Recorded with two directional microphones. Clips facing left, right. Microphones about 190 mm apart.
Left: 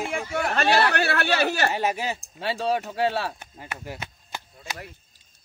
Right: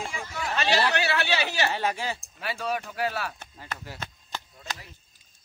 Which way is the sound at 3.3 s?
15° left (ahead or behind).